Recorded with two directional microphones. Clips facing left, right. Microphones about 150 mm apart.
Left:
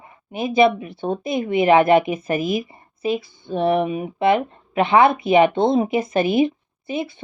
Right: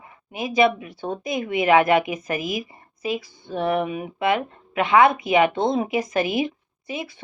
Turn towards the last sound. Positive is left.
turn(degrees=25)  # may be behind; listen again after turning